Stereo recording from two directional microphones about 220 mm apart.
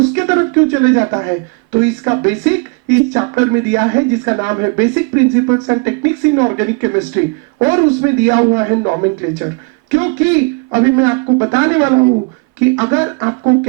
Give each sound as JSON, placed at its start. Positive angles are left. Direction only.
{"t": 0.1, "sound": "speech", "side_deg": -15}